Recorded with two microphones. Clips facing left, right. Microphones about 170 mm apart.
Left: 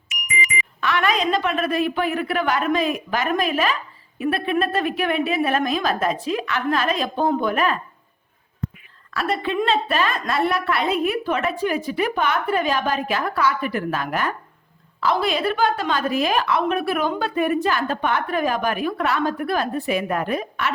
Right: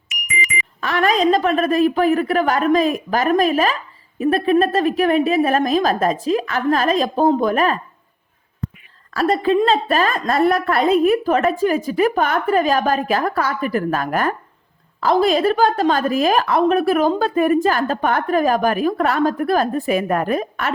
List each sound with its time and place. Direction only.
0.3 s a woman's voice: 45° right (ahead or behind)
9.1 s a woman's voice: 35° right (ahead or behind)